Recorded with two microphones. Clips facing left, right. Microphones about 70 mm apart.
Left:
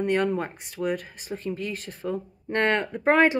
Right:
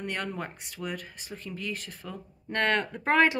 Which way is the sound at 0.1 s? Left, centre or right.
Centre.